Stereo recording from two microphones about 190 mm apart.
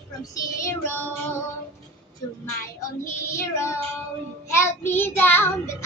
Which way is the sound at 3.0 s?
15° left (ahead or behind).